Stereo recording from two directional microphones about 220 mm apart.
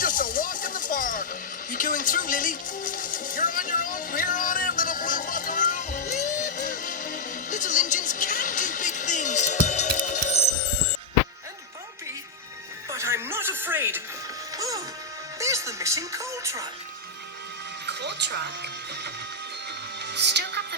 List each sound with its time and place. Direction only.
0.0 s a sound: 40° left (ahead or behind)
12.9 s music: 10° right (ahead or behind)
17.8 s speech: 50° right (ahead or behind)
20.0 s music: 50° right (ahead or behind)